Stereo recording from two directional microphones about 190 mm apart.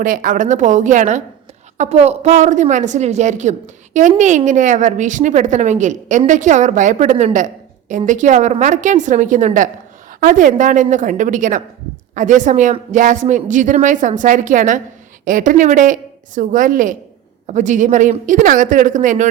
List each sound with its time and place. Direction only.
0.0 s a woman's voice: 45° right (ahead or behind)